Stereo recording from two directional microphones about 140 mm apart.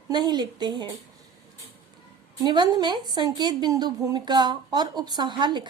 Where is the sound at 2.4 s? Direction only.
30° right (ahead or behind).